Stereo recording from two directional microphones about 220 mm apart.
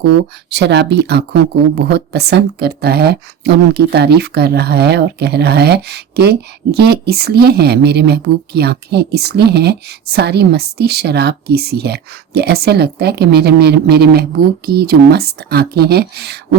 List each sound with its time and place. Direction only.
0.5 s speech: 50° right (ahead or behind)